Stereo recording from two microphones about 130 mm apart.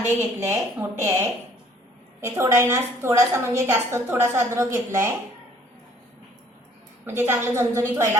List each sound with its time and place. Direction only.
0.0 s a woman's voice: 20° right (ahead or behind)
7.0 s a woman's voice: 20° right (ahead or behind)